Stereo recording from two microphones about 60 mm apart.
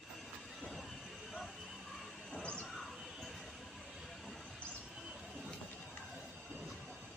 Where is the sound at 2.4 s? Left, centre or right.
Left.